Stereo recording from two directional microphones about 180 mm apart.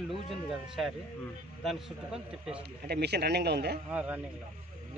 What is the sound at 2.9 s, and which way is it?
Speech, 65° right (ahead or behind).